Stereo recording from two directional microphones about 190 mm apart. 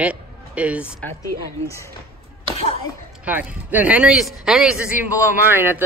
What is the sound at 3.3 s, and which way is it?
Speech, 10° right (ahead or behind).